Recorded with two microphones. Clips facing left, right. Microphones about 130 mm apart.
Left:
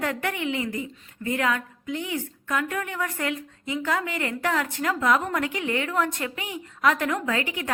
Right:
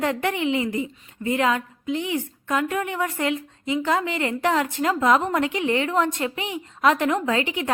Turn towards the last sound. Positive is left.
turn(degrees=-20)  # may be behind; listen again after turning